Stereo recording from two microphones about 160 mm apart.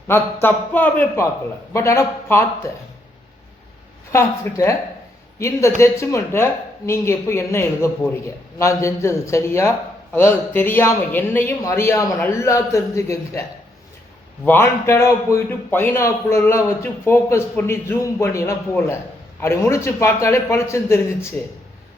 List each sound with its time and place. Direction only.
0.1 s speech: 15° left (ahead or behind)
4.1 s speech: 15° left (ahead or behind)
14.4 s speech: 15° left (ahead or behind)